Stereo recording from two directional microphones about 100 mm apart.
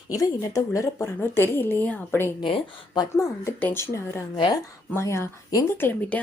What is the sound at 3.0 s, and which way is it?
Speech, 30° left (ahead or behind).